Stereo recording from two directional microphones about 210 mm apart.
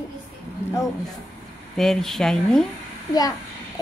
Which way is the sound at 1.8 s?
Centre (ahead or behind).